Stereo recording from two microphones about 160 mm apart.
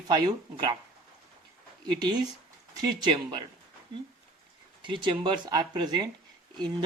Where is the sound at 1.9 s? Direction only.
25° right (ahead or behind).